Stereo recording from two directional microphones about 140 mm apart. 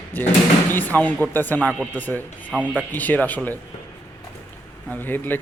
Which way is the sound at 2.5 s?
10° right (ahead or behind).